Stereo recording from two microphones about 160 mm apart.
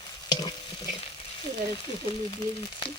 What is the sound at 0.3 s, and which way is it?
Stir, 25° left (ahead or behind).